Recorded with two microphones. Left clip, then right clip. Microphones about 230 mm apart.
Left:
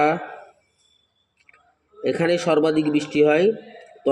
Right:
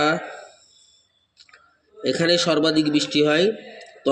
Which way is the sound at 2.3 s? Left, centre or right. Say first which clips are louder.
Even; centre.